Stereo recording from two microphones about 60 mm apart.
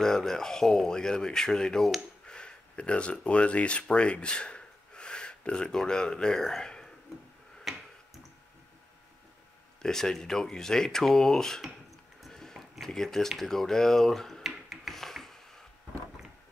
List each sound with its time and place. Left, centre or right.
0.0 s speech: centre
7.7 s tick-tock: centre
9.8 s speech: centre
12.3 s a sound: centre
13.3 s speech: centre
14.5 s rub: centre